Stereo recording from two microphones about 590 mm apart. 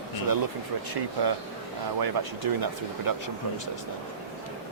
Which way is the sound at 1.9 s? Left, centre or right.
Right.